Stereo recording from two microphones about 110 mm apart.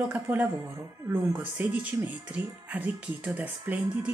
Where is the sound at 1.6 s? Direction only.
15° right (ahead or behind).